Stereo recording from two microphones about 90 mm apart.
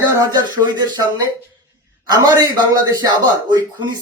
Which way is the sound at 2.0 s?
45° right (ahead or behind).